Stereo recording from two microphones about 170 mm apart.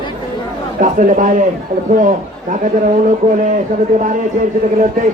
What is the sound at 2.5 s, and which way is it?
Speech, 50° right (ahead or behind).